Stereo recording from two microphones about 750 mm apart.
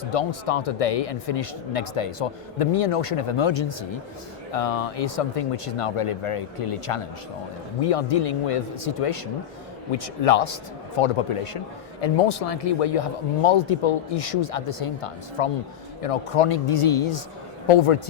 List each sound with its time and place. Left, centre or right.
0.1 s a man's voice: left
4.5 s a man's voice: left